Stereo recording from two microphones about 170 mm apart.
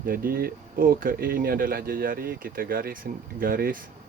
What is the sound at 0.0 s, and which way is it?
Speech, 60° right (ahead or behind).